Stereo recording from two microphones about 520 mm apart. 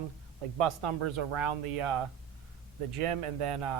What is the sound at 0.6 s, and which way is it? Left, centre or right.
Speech, right.